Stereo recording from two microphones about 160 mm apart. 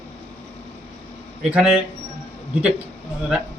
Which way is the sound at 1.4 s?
5° right (ahead or behind).